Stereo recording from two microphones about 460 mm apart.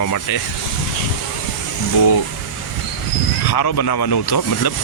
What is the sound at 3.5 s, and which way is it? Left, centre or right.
Speech, left.